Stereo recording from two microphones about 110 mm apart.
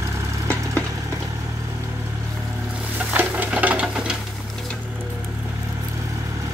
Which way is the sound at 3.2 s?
15° right (ahead or behind).